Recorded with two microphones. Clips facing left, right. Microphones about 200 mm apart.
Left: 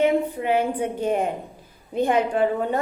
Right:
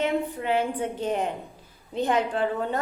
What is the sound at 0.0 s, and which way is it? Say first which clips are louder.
A woman's voice: left 5 dB; 10° left (ahead or behind).